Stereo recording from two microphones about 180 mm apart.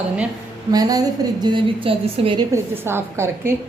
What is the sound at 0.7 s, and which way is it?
A woman's voice, 20° right (ahead or behind).